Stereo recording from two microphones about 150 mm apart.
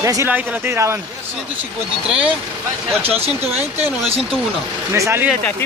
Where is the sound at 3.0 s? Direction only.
40° right (ahead or behind).